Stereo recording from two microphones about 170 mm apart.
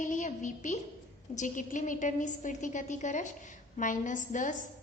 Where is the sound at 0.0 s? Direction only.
45° left (ahead or behind).